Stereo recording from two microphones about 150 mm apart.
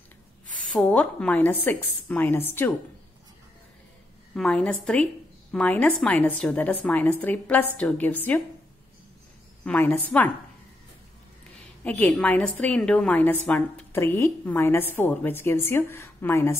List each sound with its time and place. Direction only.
0.7 s a woman's voice: 10° left (ahead or behind)
4.3 s a woman's voice: 5° left (ahead or behind)
9.7 s a woman's voice: 10° left (ahead or behind)
11.8 s a woman's voice: 10° left (ahead or behind)